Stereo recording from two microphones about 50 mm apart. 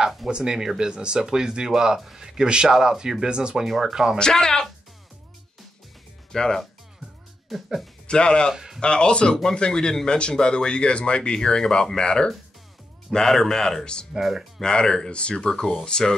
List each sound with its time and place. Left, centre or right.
0.3 s speech: centre
3.6 s speech: centre
4.2 s speech: centre
6.3 s speech: centre
7.4 s speech: centre
8.1 s speech: centre
14.1 s speech: centre
14.6 s speech: centre